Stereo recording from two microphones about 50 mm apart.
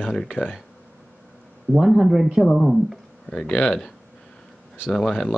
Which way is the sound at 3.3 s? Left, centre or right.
Centre.